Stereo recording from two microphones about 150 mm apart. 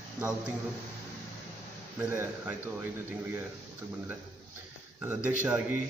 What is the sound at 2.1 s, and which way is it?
Speech, 15° right (ahead or behind).